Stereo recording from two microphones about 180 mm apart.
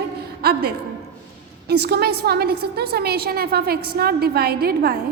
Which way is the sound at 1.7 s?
65° right (ahead or behind).